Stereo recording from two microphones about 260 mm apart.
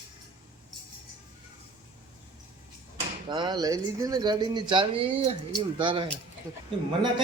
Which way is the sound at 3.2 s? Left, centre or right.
Centre.